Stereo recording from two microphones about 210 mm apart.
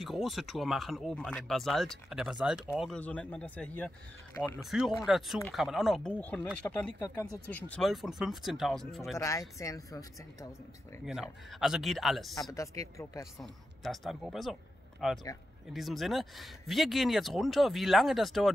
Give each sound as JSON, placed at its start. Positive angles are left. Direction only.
{"t": 0.0, "sound": "speech", "side_deg": 0}
{"t": 9.2, "sound": "speech", "side_deg": 15}
{"t": 11.1, "sound": "speech", "side_deg": 0}
{"t": 12.5, "sound": "speech", "side_deg": 15}
{"t": 13.4, "sound": "speech", "side_deg": 0}